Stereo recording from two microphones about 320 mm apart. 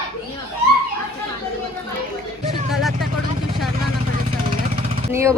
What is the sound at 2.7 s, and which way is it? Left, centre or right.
Speech, centre.